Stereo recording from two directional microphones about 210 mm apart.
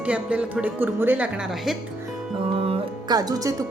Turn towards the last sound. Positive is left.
turn(degrees=-15)  # may be behind; listen again after turning